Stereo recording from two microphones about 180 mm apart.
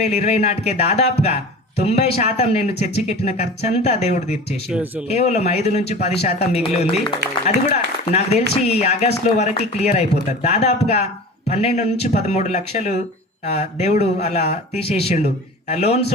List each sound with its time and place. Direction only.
0.0 s speech: 35° left (ahead or behind)
4.7 s speech: 5° right (ahead or behind)
5.0 s speech: 35° left (ahead or behind)